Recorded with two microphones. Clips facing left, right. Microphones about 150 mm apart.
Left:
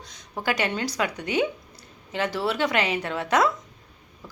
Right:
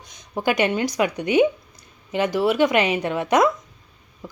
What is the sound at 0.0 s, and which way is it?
A woman's voice, 15° right (ahead or behind).